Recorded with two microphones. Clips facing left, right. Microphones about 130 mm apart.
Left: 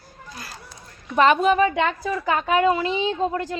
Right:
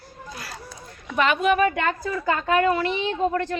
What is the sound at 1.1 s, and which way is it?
Speech, 35° left (ahead or behind).